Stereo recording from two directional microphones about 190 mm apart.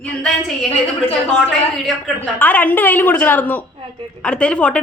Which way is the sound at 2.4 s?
10° left (ahead or behind).